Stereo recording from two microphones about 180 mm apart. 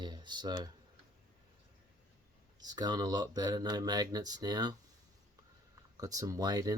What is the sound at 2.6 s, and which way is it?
Speech, 25° right (ahead or behind).